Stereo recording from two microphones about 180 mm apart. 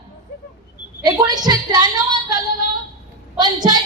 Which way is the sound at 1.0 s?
20° right (ahead or behind).